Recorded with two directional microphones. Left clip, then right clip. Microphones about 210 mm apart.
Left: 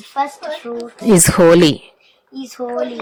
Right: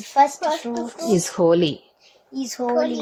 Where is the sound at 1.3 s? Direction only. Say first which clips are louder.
Left 8 dB; 35° left (ahead or behind).